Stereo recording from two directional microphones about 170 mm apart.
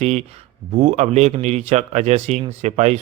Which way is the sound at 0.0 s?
40° right (ahead or behind).